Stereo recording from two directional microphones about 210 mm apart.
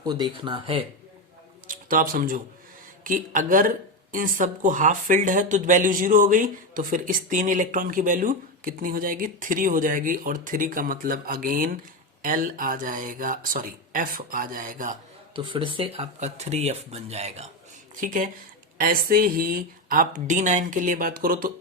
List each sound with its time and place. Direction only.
0.0 s speech: 20° right (ahead or behind)
1.6 s a sound: 40° right (ahead or behind)
3.0 s speech: 40° right (ahead or behind)
15.4 s speech: 25° right (ahead or behind); by 21.5 s 45° right (ahead or behind)